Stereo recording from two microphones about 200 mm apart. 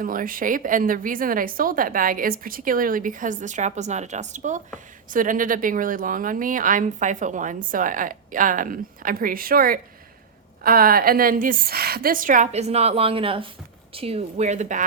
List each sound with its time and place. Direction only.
0.0 s speech: 45° right (ahead or behind)